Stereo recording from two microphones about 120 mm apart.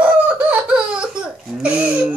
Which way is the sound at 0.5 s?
10° right (ahead or behind).